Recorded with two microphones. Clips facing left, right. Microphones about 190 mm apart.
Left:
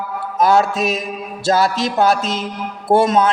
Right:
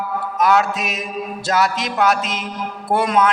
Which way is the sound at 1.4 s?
30° left (ahead or behind).